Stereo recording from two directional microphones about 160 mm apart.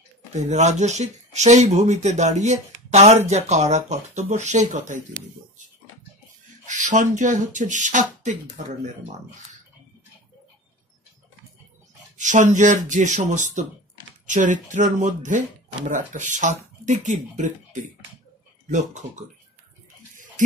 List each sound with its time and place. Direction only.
0.3 s speech: 45° right (ahead or behind)
6.6 s speech: 50° right (ahead or behind)
12.2 s speech: 50° right (ahead or behind)
20.4 s speech: 55° right (ahead or behind)